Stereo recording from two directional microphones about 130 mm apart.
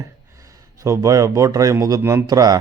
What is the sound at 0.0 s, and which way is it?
Speech, 25° right (ahead or behind).